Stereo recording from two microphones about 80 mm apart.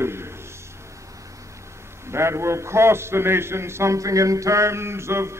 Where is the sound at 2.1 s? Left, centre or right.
Right.